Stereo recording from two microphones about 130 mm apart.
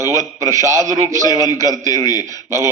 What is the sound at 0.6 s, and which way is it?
Speech, 25° right (ahead or behind).